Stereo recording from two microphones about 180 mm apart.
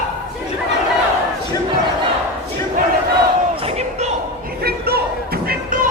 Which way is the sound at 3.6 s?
35° right (ahead or behind).